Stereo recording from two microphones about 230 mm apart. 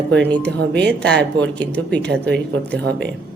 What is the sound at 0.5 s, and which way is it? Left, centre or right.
Speech, right.